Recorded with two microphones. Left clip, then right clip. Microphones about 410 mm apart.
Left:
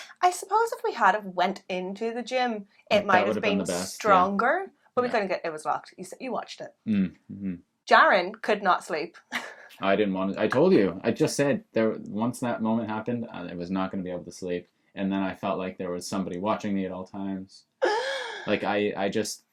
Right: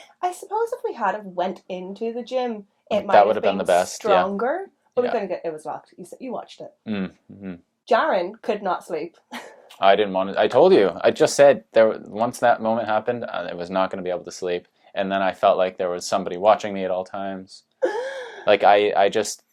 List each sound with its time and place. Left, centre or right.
0.0 s speech: left
6.8 s speech: right
7.9 s speech: centre
9.8 s speech: right
18.4 s speech: right